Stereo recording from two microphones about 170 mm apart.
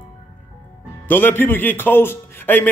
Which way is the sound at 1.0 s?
10° left (ahead or behind).